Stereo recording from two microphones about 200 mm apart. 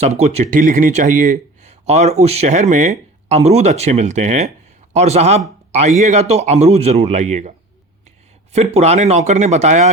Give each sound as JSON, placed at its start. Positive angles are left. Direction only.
{"t": 0.0, "sound": "speech", "side_deg": -35}
{"t": 8.5, "sound": "speech", "side_deg": -30}